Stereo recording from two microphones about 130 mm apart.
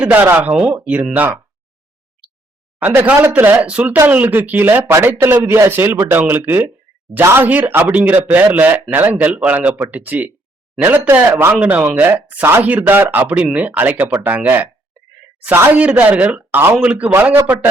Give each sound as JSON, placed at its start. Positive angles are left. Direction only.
{"t": 0.0, "sound": "speech", "side_deg": -15}
{"t": 2.7, "sound": "speech", "side_deg": -15}